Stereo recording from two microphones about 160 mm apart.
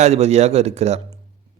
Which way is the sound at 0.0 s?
40° right (ahead or behind).